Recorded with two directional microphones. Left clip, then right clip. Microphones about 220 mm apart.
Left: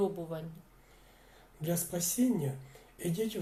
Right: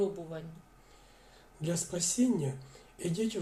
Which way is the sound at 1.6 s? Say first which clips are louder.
Right 1 dB; 15° right (ahead or behind).